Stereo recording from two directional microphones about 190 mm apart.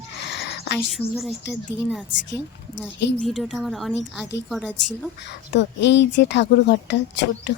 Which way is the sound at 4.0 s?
70° left (ahead or behind).